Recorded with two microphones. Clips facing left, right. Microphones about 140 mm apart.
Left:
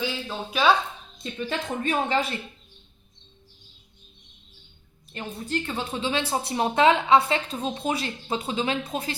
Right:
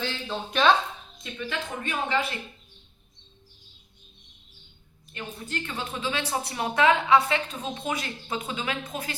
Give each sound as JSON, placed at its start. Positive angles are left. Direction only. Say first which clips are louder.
{"t": 0.0, "sound": "speech", "louder": "left 1 dB", "side_deg": 5}
{"t": 1.2, "sound": "speech", "louder": "left 3 dB", "side_deg": 35}
{"t": 5.1, "sound": "a woman's voice", "louder": "left 5 dB", "side_deg": 30}